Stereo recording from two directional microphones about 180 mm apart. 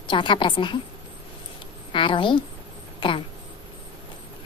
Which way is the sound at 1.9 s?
30° left (ahead or behind).